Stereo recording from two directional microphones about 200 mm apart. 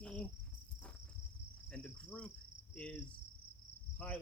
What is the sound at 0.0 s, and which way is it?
Cricket, 5° left (ahead or behind).